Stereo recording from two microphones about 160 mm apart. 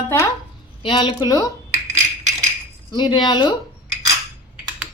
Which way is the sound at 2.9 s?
25° left (ahead or behind).